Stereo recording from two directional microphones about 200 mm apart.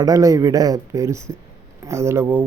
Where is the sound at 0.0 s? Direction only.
20° right (ahead or behind).